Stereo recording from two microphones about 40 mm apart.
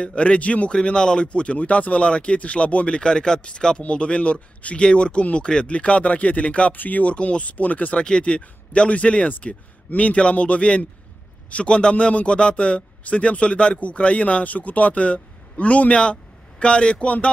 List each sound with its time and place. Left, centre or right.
0.0 s speech: left
6.7 s a man's voice: left
8.0 s a man's voice: left